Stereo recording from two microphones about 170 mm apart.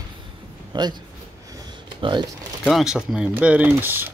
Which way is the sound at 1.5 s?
25° right (ahead or behind).